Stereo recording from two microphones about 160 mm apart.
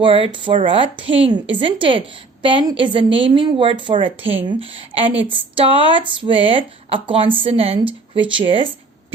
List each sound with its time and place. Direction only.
0.0 s speech: 35° right (ahead or behind)